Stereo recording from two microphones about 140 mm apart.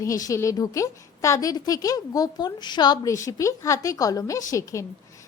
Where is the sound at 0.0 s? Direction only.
25° left (ahead or behind).